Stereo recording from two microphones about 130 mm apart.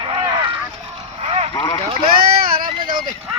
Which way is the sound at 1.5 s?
35° left (ahead or behind).